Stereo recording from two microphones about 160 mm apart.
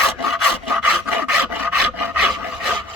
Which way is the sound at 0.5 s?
10° right (ahead or behind).